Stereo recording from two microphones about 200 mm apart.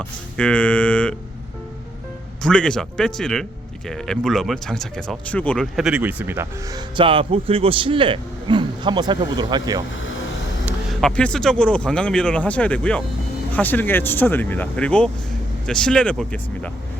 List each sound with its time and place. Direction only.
0.0 s speech: 5° left (ahead or behind)
2.4 s speech: 5° left (ahead or behind); by 6.8 s 10° right (ahead or behind)
6.9 s a man's voice: 25° right (ahead or behind)
10.7 s speech: 5° left (ahead or behind)